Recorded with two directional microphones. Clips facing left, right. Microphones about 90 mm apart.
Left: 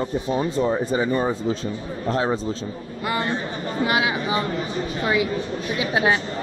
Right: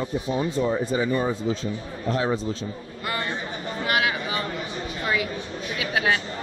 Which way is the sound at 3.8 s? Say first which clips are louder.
Left 1 dB; 20° left (ahead or behind).